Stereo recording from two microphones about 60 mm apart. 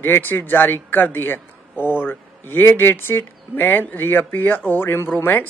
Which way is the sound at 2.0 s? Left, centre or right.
Left.